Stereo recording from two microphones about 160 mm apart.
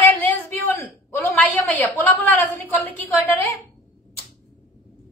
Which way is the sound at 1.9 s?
10° left (ahead or behind).